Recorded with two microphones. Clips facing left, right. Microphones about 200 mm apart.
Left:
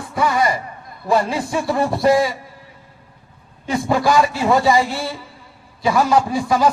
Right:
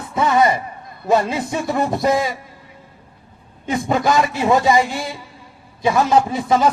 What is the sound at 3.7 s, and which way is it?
A man's voice, 20° right (ahead or behind).